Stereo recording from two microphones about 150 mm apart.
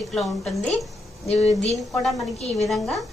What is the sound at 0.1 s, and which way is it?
Speech, centre (ahead or behind).